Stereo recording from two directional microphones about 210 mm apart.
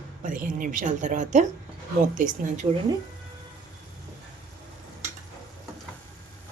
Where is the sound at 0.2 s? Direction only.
40° right (ahead or behind).